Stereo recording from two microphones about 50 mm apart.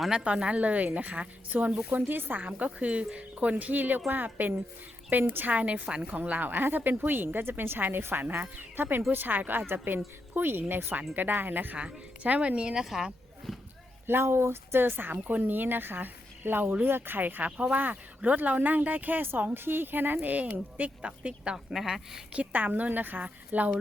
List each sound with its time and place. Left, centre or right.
0.1 s a woman's voice: centre
2.0 s a woman's voice: right
3.5 s speech: right
11.8 s a woman's voice: right; by 13.1 s centre
13.5 s a sound: centre
14.1 s speech: right
15.1 s a woman's voice: right
21.5 s a woman's voice: centre
22.3 s speech: right